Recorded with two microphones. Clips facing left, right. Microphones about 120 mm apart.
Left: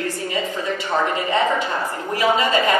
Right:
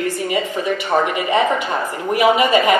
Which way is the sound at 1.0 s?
20° right (ahead or behind).